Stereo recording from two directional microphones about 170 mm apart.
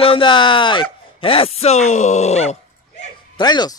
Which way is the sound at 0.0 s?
30° left (ahead or behind).